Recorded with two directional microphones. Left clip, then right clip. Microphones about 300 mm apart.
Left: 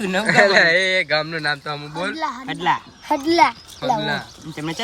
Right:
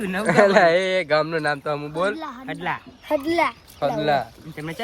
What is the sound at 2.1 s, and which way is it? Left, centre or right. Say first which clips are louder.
Speech: left 6 dB; left.